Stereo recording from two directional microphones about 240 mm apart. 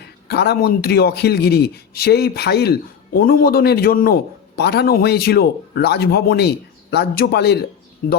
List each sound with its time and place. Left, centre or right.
0.0 s a man's voice: left